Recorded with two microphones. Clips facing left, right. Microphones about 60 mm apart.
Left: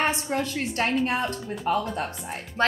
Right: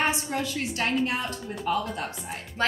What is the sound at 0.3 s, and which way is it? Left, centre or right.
Speech, left.